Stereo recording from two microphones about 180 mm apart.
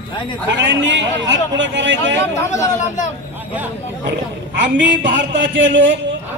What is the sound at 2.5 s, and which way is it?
Speech, 15° left (ahead or behind).